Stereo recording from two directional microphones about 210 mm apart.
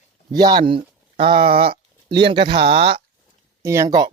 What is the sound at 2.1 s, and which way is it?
Speech, 20° right (ahead or behind).